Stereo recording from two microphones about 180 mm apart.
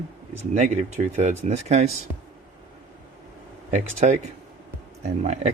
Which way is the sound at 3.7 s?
40° right (ahead or behind).